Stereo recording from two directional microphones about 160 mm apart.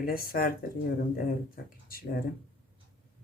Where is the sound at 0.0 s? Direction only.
65° left (ahead or behind).